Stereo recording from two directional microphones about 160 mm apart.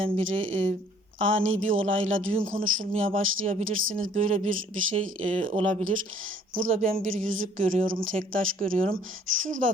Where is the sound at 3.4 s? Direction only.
55° right (ahead or behind).